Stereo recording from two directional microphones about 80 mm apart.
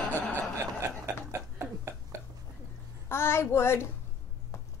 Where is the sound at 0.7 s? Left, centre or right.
Right.